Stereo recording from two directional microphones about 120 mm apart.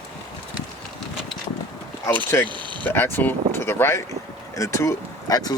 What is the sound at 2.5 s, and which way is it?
Speech, 40° right (ahead or behind).